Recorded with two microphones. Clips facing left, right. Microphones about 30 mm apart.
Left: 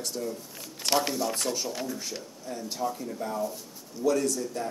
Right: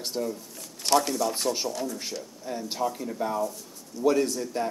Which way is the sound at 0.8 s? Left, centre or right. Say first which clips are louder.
Right 3 dB; centre.